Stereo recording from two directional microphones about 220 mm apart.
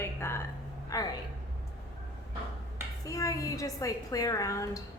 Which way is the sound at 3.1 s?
15° left (ahead or behind).